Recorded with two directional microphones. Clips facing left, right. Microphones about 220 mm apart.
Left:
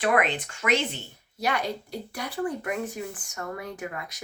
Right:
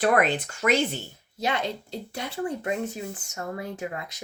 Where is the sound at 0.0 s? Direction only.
40° right (ahead or behind).